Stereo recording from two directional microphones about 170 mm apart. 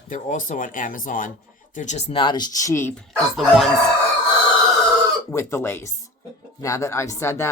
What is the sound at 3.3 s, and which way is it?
Chicken, centre (ahead or behind).